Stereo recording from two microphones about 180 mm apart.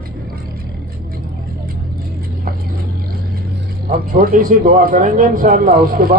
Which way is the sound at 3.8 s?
55° right (ahead or behind).